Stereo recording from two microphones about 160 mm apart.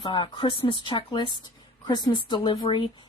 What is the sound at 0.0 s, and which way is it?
Speech, 30° left (ahead or behind).